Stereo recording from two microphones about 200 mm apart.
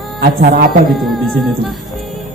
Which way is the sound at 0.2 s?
45° right (ahead or behind).